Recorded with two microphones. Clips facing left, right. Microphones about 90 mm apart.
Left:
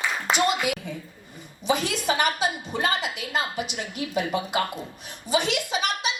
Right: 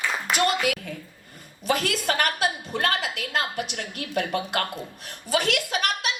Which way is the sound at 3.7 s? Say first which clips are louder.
Left 2 dB; 60° right (ahead or behind).